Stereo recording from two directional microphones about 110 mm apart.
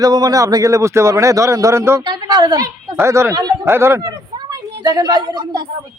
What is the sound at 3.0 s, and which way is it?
A woman's voice, 25° right (ahead or behind).